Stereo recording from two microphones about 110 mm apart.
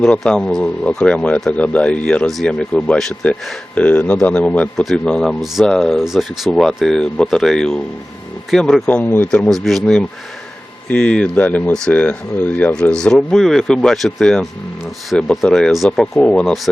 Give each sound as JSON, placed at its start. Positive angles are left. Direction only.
{"t": 0.0, "sound": "speech", "side_deg": 5}
{"t": 8.9, "sound": "speech", "side_deg": 15}
{"t": 9.3, "sound": "speech", "side_deg": 5}